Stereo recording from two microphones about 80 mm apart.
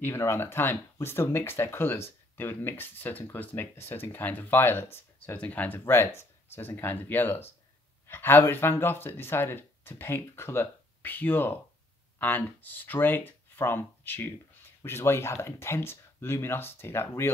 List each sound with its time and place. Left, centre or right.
0.0 s speech: left